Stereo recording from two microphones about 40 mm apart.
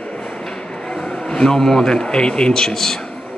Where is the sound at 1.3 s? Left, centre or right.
Centre.